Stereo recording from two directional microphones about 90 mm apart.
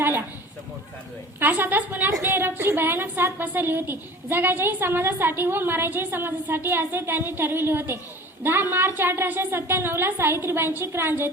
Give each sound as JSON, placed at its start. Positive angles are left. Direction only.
{"t": 1.4, "sound": "a woman's voice", "side_deg": -20}